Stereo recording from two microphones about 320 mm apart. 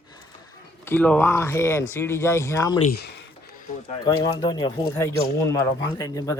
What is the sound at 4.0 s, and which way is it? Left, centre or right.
Speech, centre.